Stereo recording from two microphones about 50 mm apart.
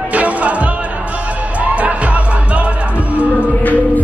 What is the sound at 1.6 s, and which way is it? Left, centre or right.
Music, right.